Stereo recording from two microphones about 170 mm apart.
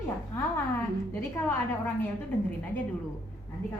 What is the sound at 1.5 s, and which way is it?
Speech, 10° left (ahead or behind).